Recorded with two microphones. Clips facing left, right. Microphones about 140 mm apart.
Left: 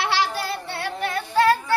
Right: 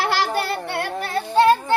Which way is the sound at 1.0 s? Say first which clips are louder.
Right 3 dB; 30° right (ahead or behind).